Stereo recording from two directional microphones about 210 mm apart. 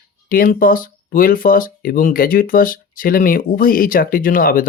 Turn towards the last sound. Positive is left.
turn(degrees=40)  # may be behind; listen again after turning